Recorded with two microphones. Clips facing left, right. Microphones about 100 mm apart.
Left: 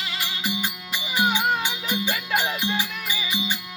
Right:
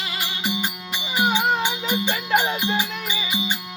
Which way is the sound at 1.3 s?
20° right (ahead or behind).